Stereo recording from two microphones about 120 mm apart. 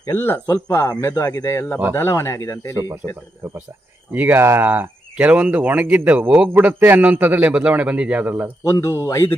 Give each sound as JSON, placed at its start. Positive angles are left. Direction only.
{"t": 0.1, "sound": "speech", "side_deg": 20}
{"t": 3.4, "sound": "speech", "side_deg": -20}
{"t": 8.6, "sound": "speech", "side_deg": 25}